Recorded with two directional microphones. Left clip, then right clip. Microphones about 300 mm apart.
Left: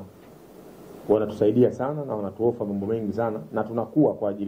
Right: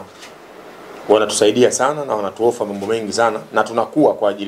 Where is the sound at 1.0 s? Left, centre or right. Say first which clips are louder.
Right 8 dB; centre.